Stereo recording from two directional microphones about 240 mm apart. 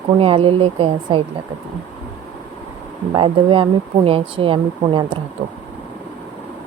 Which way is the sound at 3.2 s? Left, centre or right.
Right.